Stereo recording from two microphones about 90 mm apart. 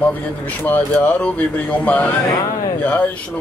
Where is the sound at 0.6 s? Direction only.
20° left (ahead or behind).